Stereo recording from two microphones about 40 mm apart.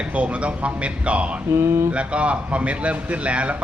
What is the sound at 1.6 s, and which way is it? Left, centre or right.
Speech, right.